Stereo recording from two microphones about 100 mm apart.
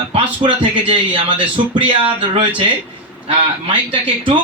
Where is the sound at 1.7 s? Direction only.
55° right (ahead or behind).